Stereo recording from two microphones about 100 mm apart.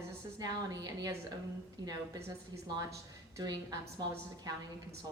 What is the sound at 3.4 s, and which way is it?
A woman's voice, 45° right (ahead or behind).